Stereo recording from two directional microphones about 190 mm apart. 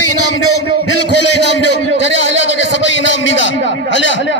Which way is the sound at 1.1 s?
65° left (ahead or behind).